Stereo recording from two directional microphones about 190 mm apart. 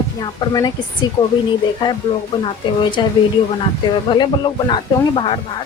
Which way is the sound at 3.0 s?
25° left (ahead or behind).